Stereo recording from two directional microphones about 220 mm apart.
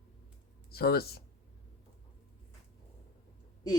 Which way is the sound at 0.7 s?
45° left (ahead or behind).